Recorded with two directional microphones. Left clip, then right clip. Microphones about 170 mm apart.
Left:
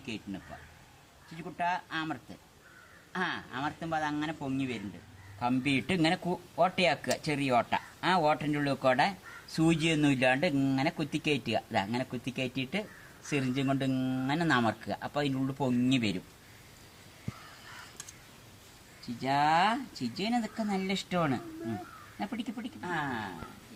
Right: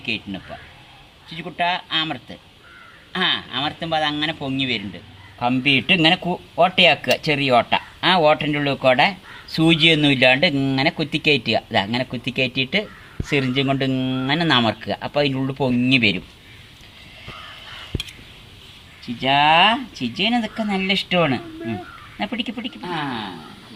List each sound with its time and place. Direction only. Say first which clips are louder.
1.4 s a man's voice: right 10 dB; 20° right (ahead or behind)
3.2 s a man's voice: right 13 dB; 20° right (ahead or behind)
19.2 s a man's voice: right 12 dB; 15° right (ahead or behind)